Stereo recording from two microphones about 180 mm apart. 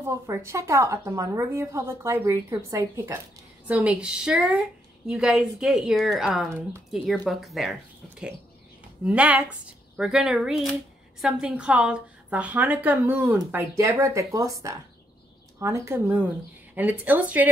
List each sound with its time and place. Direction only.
0.0 s a woman's voice: 15° right (ahead or behind)
9.0 s speech: 10° right (ahead or behind)